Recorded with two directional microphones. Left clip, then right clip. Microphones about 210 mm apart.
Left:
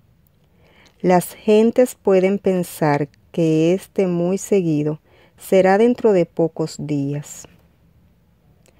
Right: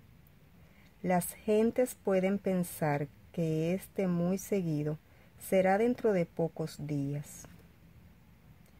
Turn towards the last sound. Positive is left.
turn(degrees=40)  # may be behind; listen again after turning